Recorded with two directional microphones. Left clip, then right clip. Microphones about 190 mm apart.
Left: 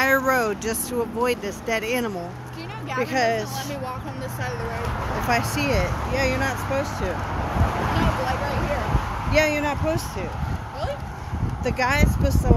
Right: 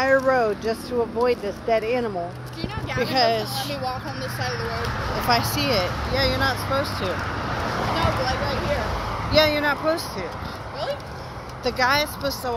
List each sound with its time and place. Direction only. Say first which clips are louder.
0.0 s a sound: right 1 dB; 40° left (ahead or behind)
1.2 s speech: right 2 dB; 30° left (ahead or behind)
2.9 s speech: right 1 dB; 5° left (ahead or behind)
5.3 s speech: right 2 dB; 15° left (ahead or behind)
9.3 s speech: right 2 dB; 20° left (ahead or behind)
11.6 s speech: right 2 dB; 10° left (ahead or behind)